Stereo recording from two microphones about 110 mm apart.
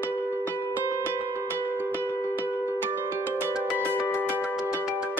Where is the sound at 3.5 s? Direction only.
10° right (ahead or behind).